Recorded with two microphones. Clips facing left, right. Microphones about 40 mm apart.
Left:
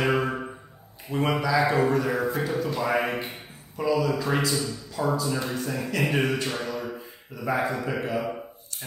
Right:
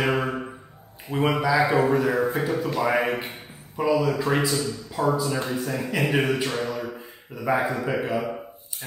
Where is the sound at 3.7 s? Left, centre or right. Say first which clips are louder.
Right 2 dB; centre.